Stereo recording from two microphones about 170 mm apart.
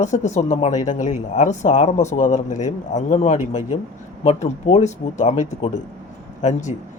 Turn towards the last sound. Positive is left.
turn(degrees=45)  # may be behind; listen again after turning